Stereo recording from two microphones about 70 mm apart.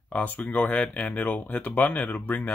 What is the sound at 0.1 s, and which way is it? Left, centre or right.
Speech, left.